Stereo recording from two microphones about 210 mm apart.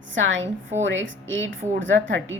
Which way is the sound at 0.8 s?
65° right (ahead or behind).